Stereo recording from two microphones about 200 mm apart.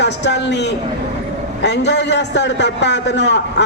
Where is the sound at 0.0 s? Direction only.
60° left (ahead or behind).